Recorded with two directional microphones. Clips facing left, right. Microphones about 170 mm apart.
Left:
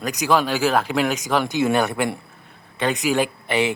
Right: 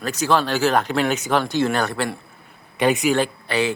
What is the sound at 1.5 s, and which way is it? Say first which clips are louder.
Speech: left 1 dB; 15° left (ahead or behind).